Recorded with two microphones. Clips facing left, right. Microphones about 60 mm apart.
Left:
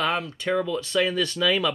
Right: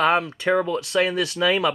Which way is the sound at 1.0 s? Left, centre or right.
Centre.